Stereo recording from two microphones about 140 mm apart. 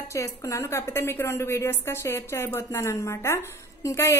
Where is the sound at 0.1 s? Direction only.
20° left (ahead or behind).